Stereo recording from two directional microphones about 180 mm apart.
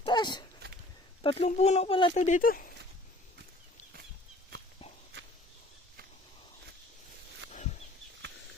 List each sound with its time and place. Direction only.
0.0 s dog: 25° left (ahead or behind)
1.2 s speech: 30° left (ahead or behind)
2.1 s speech: 40° left (ahead or behind)
7.5 s chicken: 40° left (ahead or behind)